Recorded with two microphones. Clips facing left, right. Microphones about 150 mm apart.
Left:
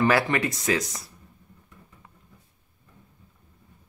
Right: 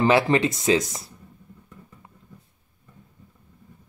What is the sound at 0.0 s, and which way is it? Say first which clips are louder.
Speech: right 3 dB; 25° right (ahead or behind).